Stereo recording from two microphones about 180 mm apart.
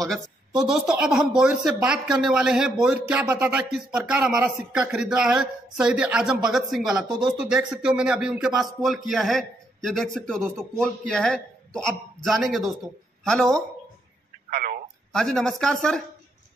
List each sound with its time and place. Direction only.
0.6 s a man's voice: 5° right (ahead or behind)
14.5 s telephone: 55° right (ahead or behind)
15.1 s speech: 5° left (ahead or behind)